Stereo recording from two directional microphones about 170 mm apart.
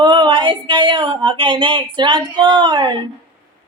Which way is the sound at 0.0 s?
25° right (ahead or behind).